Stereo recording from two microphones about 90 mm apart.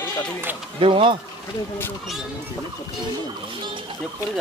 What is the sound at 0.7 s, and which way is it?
Speech, 70° right (ahead or behind).